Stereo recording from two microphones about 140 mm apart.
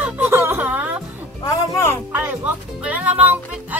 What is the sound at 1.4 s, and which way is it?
Music, 20° left (ahead or behind).